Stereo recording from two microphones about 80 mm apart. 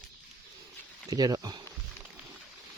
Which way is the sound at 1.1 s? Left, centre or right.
Right.